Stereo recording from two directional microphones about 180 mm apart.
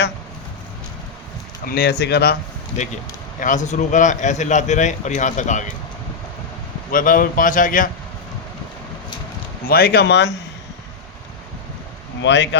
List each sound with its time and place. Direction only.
1.6 s speech: 60° left (ahead or behind)
3.4 s a man's voice: 45° left (ahead or behind)
6.9 s a man's voice: 50° left (ahead or behind)
9.6 s speech: 55° left (ahead or behind)
12.2 s speech: 80° left